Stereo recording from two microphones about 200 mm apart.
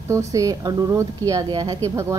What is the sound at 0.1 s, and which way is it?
A woman's voice, 15° right (ahead or behind).